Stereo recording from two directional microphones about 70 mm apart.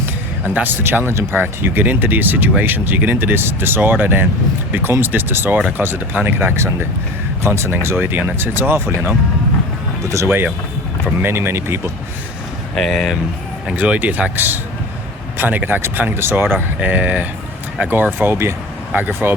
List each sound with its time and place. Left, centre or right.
0.0 s a sound: right
1.1 s speech: right
10.1 s speech: right
11.0 s speech: right
12.7 s speech: centre
13.7 s speech: right
18.9 s speech: right